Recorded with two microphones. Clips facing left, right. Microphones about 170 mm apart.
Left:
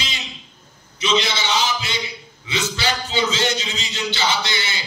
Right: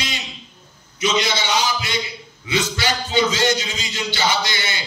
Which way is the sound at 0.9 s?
30° left (ahead or behind).